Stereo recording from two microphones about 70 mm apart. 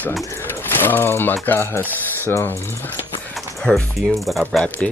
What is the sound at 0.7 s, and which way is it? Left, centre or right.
Speech, left.